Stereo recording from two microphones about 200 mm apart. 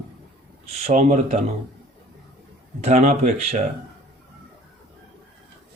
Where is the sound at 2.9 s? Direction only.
35° right (ahead or behind).